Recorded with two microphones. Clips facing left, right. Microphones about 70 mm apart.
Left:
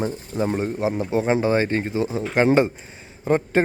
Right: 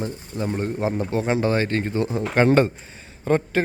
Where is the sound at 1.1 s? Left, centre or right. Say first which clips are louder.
Left 3 dB; centre.